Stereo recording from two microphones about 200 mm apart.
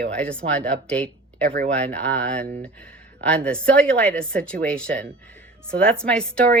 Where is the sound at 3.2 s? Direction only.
5° left (ahead or behind).